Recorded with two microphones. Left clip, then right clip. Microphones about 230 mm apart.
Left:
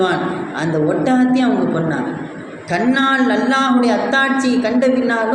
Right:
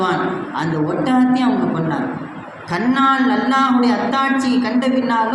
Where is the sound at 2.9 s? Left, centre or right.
Right.